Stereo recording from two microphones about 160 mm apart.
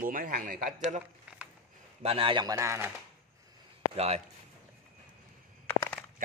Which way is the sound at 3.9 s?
40° right (ahead or behind).